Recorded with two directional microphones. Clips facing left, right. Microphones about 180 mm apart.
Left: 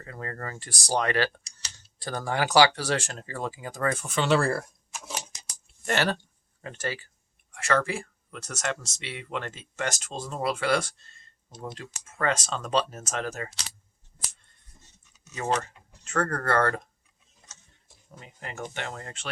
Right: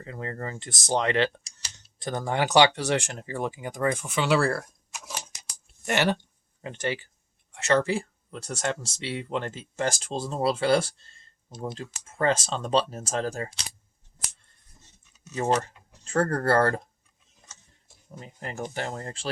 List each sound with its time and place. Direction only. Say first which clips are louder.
0.0 s speech: right 2 dB; 20° right (ahead or behind); by 4.6 s 5° right (ahead or behind)
5.8 s speech: right 2 dB; 15° right (ahead or behind); by 13.5 s 35° right (ahead or behind)
15.4 s speech: right 3 dB; 30° right (ahead or behind)
18.1 s speech: right 4 dB; 35° right (ahead or behind)